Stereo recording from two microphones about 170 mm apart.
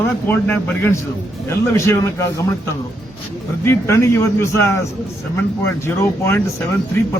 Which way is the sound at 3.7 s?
15° left (ahead or behind).